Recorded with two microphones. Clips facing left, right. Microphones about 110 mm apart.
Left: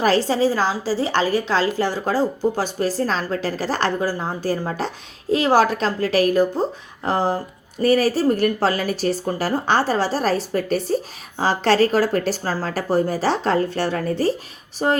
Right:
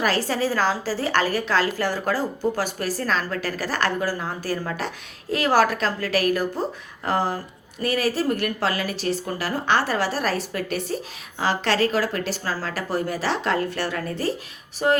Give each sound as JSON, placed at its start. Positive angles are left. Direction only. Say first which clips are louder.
{"t": 0.2, "sound": "a woman's voice", "louder": "left 4 dB", "side_deg": 20}